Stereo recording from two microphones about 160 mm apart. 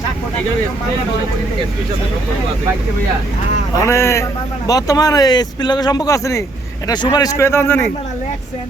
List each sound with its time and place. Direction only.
3.8 s a man's voice: 15° left (ahead or behind)